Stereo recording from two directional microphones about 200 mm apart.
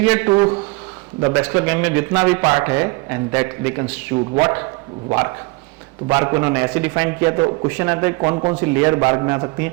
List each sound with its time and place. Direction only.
0.0 s a man's voice: 10° right (ahead or behind)
8.2 s a man's voice: 25° right (ahead or behind)
8.6 s a man's voice: 15° right (ahead or behind)